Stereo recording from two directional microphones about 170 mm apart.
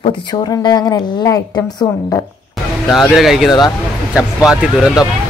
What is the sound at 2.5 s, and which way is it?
Speech, centre (ahead or behind).